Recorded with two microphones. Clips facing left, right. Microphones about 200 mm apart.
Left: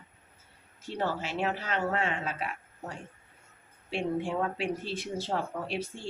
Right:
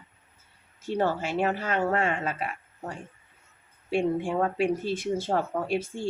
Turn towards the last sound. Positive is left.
turn(degrees=-50)  # may be behind; listen again after turning